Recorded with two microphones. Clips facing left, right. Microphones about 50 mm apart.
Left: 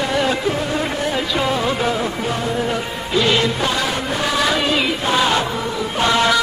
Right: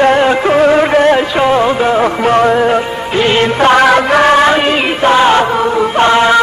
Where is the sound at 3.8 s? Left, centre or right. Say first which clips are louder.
Right 13 dB; right.